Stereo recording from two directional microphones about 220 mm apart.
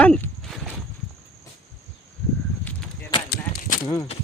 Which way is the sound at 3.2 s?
45° left (ahead or behind).